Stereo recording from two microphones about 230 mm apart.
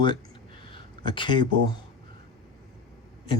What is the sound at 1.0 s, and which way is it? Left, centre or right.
Speech, left.